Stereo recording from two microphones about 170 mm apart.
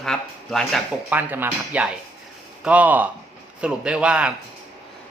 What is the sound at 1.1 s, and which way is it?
Speech, 10° right (ahead or behind).